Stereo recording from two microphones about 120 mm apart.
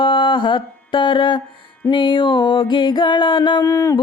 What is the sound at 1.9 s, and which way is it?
Music, 40° left (ahead or behind).